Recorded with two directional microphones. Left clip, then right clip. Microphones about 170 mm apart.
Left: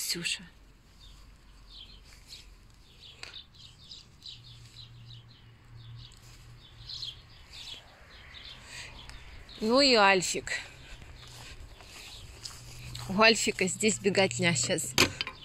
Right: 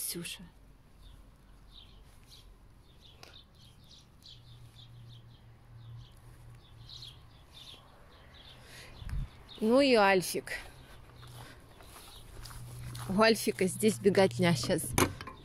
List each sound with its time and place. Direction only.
0.0 s speech: 5° right (ahead or behind)
8.6 s a sound: centre (ahead or behind)
9.7 s speech: 20° right (ahead or behind)
13.1 s speech: 20° right (ahead or behind)